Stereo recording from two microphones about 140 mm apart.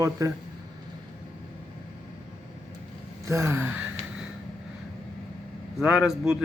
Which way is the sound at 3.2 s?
20° right (ahead or behind).